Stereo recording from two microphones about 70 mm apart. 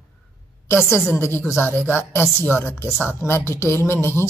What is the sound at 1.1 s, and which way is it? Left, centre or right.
A woman's voice, left.